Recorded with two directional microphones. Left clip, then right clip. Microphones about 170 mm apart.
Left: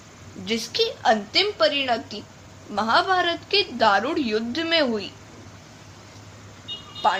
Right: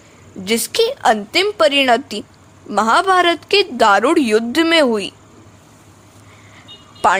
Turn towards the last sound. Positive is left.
turn(degrees=-65)  # may be behind; listen again after turning